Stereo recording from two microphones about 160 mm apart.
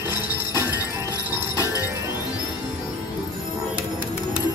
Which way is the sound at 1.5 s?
20° left (ahead or behind).